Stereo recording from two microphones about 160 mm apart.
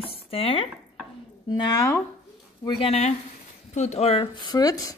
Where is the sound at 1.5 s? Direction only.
25° left (ahead or behind).